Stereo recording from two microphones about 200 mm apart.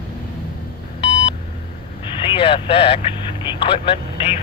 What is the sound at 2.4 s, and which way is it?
Speech, 25° left (ahead or behind).